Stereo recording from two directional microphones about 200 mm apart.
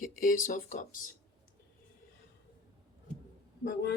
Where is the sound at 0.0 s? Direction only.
40° left (ahead or behind).